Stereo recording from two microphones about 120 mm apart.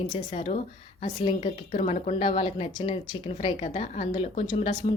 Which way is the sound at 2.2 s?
50° left (ahead or behind).